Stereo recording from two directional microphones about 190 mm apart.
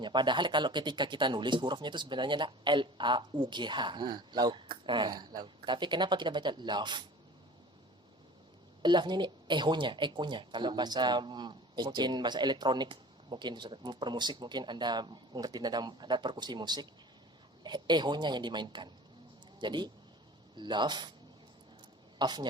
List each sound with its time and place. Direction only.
0.0 s speech: 25° right (ahead or behind)
8.8 s speech: 25° right (ahead or behind)
22.2 s speech: 25° right (ahead or behind)